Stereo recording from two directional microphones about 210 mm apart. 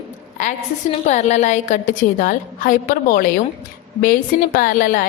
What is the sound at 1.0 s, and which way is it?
A woman's voice, 35° left (ahead or behind).